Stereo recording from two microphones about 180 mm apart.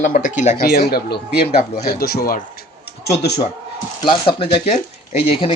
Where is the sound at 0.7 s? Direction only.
60° left (ahead or behind).